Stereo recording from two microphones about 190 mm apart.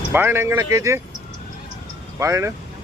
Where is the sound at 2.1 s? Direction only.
15° right (ahead or behind).